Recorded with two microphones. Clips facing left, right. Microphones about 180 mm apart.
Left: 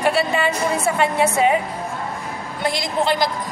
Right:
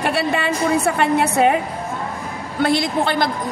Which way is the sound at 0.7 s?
65° right (ahead or behind).